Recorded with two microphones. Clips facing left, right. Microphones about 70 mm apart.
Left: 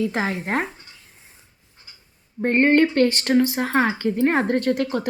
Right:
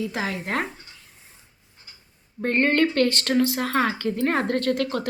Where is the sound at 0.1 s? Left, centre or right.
Left.